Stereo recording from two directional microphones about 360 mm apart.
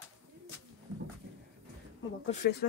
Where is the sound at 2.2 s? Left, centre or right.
Left.